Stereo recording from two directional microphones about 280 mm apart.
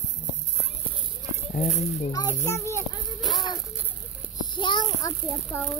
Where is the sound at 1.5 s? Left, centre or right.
Left.